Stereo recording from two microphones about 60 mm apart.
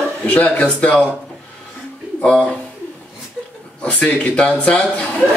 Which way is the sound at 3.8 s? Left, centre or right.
Left.